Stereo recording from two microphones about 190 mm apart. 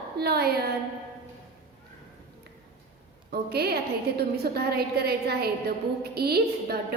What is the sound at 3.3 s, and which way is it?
A woman's voice, 55° right (ahead or behind).